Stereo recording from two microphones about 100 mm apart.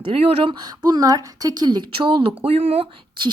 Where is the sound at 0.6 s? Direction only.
45° right (ahead or behind); by 2.8 s 75° right (ahead or behind).